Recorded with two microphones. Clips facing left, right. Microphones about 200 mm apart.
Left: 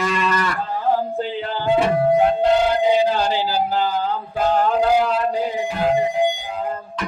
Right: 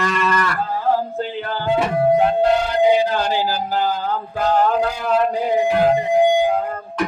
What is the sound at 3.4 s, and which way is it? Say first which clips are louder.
Speech: left 1 dB; 50° right (ahead or behind).